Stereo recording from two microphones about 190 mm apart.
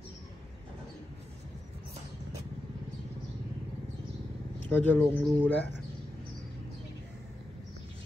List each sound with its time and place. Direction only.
4.6 s speech: 10° left (ahead or behind)